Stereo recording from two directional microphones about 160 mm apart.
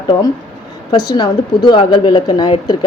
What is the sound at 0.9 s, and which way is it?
A woman's voice, 25° left (ahead or behind).